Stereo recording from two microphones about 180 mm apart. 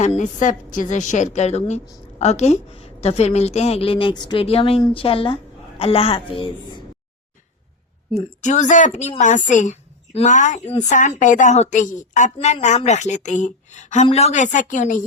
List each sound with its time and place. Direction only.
0.0 s a woman's voice: 40° left (ahead or behind)
8.4 s a woman's voice: 40° left (ahead or behind)